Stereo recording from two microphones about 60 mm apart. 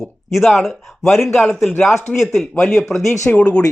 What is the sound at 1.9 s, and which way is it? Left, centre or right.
Speech, left.